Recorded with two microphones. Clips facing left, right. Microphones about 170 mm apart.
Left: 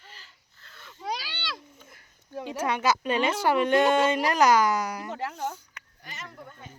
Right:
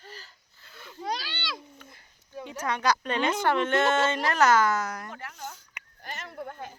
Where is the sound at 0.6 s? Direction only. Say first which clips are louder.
Right 3 dB; 5° right (ahead or behind).